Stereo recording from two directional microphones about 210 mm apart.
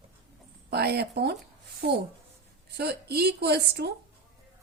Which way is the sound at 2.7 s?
50° right (ahead or behind).